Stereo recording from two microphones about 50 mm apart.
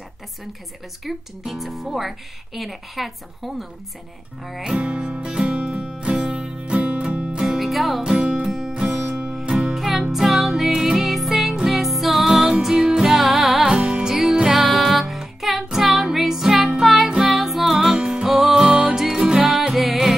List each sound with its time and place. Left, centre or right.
1.0 s speech: centre
4.6 s music: centre
7.4 s music: centre
8.0 s music: centre
9.3 s music: centre
13.7 s music: centre
17.7 s music: centre
18.7 s music: right
18.9 s music: centre